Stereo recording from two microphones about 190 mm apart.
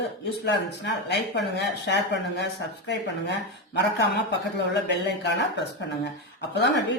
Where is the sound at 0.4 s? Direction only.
60° left (ahead or behind).